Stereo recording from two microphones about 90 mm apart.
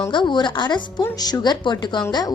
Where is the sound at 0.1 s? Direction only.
60° left (ahead or behind).